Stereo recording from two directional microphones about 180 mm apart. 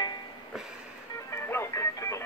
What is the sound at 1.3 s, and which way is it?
Music, 15° left (ahead or behind).